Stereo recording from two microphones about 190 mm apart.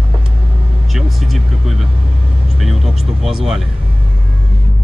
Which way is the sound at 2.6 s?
Centre (ahead or behind).